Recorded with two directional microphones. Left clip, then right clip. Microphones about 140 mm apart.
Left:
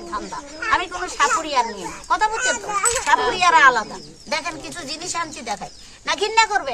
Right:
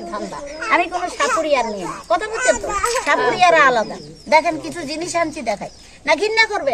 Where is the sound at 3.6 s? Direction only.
35° left (ahead or behind).